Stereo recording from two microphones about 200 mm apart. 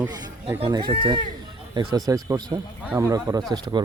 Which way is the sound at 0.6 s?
20° right (ahead or behind).